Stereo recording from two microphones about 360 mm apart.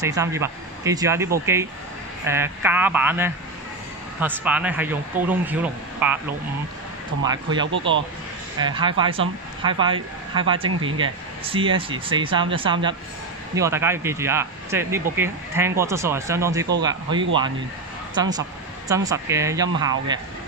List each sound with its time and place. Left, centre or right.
0.0 s speech: centre
7.6 s speech: right
8.5 s speech: centre
10.7 s speech: right
11.0 s speech: centre